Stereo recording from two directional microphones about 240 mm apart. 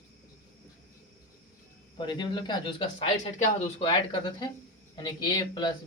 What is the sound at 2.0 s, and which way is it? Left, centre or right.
Speech, centre.